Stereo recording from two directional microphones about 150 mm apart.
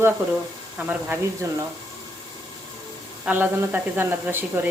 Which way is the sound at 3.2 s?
10° right (ahead or behind).